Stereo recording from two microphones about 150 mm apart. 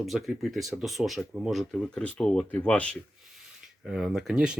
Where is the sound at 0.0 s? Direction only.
Centre (ahead or behind).